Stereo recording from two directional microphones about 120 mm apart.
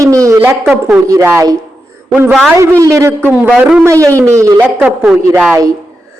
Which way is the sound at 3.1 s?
15° right (ahead or behind).